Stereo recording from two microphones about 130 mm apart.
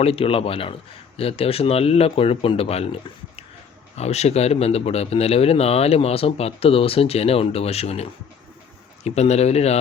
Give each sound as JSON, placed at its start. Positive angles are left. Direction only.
{"t": 0.0, "sound": "speech", "side_deg": 50}
{"t": 3.9, "sound": "speech", "side_deg": 55}
{"t": 9.0, "sound": "speech", "side_deg": 55}